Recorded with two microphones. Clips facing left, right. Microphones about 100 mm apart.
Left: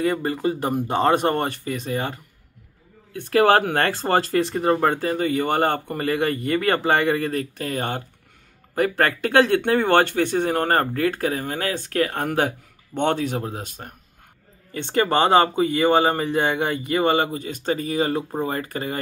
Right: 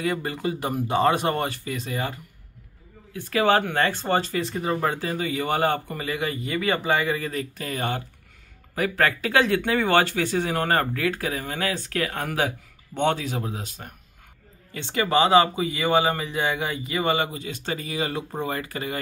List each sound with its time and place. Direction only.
0.1 s speech: 35° left (ahead or behind)
3.1 s speech: 60° left (ahead or behind)
4.6 s a man's voice: 50° left (ahead or behind)
7.2 s speech: 45° left (ahead or behind)
12.4 s speech: 45° left (ahead or behind)